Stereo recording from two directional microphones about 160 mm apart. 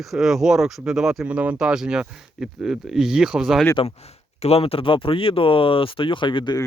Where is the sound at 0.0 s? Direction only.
Centre (ahead or behind).